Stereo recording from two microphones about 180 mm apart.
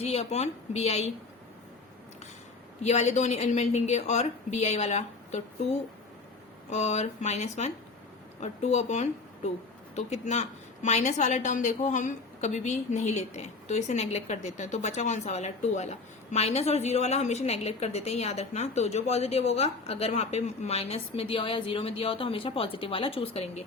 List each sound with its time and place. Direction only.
0.0 s a woman's voice: 35° left (ahead or behind)
2.8 s a woman's voice: 40° left (ahead or behind)
6.7 s a woman's voice: 40° left (ahead or behind)